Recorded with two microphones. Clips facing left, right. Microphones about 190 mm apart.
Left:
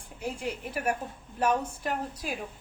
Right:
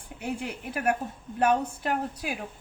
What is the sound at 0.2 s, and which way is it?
A woman's voice, 60° right (ahead or behind).